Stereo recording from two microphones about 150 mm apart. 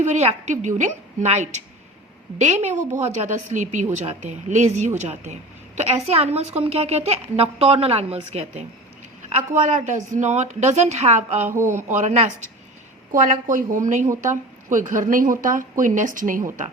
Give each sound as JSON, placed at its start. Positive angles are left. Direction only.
{"t": 0.0, "sound": "a woman's voice", "side_deg": -50}
{"t": 9.5, "sound": "a woman's voice", "side_deg": -55}